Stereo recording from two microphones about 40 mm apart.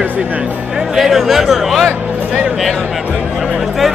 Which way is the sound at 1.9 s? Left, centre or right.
Right.